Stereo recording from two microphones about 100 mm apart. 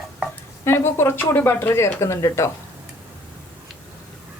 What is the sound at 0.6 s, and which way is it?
A woman's voice, 25° left (ahead or behind).